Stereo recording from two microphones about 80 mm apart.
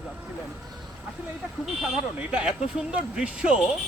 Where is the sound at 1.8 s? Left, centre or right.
Centre.